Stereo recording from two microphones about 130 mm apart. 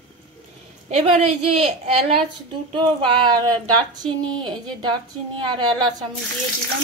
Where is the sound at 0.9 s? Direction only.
50° right (ahead or behind).